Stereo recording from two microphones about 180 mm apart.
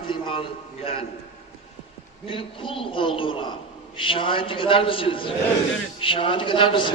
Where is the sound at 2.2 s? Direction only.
30° left (ahead or behind).